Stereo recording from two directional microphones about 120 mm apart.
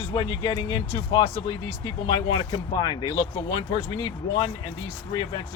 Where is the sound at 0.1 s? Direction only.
40° left (ahead or behind).